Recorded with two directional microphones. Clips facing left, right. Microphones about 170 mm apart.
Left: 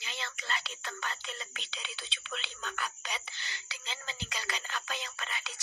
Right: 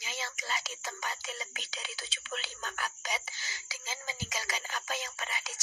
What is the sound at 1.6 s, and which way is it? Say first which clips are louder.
Speech: right 2 dB; 40° right (ahead or behind).